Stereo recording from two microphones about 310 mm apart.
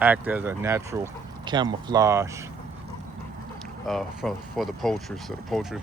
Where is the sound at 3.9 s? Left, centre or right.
Centre.